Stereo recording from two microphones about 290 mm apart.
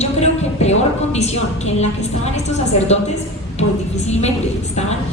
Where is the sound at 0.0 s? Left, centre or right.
Left.